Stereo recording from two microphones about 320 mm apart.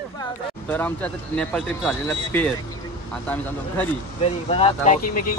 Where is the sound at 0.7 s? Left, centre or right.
Centre.